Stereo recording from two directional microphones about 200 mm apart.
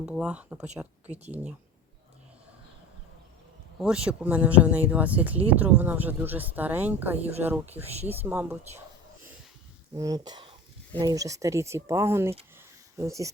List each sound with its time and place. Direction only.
0.0 s speech: 5° right (ahead or behind)
3.8 s speech: 5° right (ahead or behind)
7.7 s speech: 30° right (ahead or behind)
8.2 s speech: 10° right (ahead or behind)
9.9 s speech: 15° right (ahead or behind)
12.5 s a sound: 15° right (ahead or behind)